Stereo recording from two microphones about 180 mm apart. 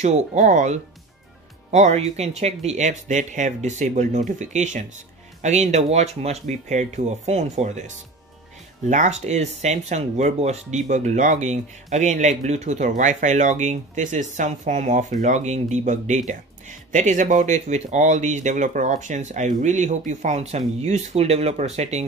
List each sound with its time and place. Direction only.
0.0 s speech: 40° right (ahead or behind)